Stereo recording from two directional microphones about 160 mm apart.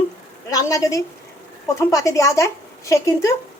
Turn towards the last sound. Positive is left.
turn(degrees=20)  # may be behind; listen again after turning